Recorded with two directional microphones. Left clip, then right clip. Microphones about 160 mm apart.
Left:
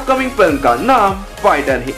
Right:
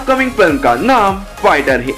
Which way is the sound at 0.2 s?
20° right (ahead or behind).